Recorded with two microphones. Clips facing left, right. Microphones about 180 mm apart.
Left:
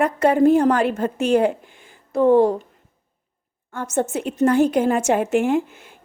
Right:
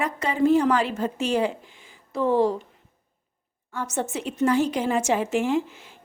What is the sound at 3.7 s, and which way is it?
A woman's voice, 50° left (ahead or behind).